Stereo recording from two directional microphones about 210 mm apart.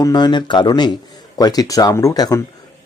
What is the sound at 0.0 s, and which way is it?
Speech, 20° left (ahead or behind).